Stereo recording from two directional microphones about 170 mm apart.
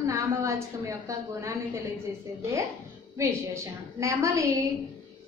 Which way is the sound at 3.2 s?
15° right (ahead or behind).